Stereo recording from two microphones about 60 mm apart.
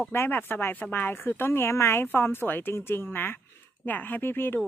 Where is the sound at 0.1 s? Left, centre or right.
Left.